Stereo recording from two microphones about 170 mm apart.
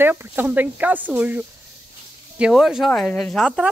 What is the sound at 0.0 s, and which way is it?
Speech, 10° right (ahead or behind).